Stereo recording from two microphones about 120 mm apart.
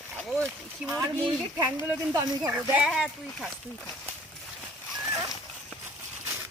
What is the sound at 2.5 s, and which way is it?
Speech, 10° right (ahead or behind).